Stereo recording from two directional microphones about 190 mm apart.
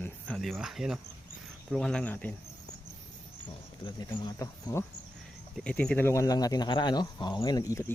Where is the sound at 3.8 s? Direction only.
20° left (ahead or behind).